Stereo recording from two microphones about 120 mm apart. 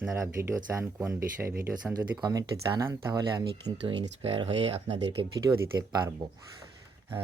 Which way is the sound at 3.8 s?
50° right (ahead or behind).